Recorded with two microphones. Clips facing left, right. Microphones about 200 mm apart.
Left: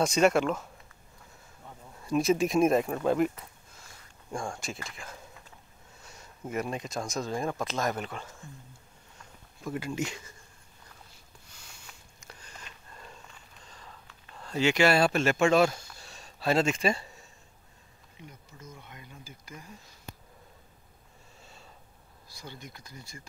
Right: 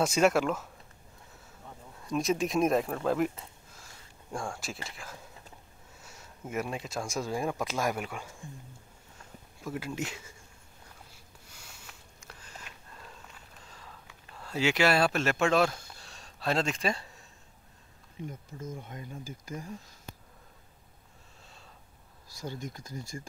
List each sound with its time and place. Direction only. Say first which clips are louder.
0.0 s speech: left 1 dB; 5° right (ahead or behind)
2.0 s speech: left 4 dB; centre (ahead or behind)
4.3 s speech: left 1 dB; centre (ahead or behind)
9.6 s speech: left 2 dB; 5° right (ahead or behind)
11.5 s sniff: right 1 dB; 5° right (ahead or behind)
13.7 s a sound: left 1 dB; 5° right (ahead or behind)
18.2 s speech: right 9 dB; 50° right (ahead or behind)
22.4 s speech: right 7 dB; 45° right (ahead or behind)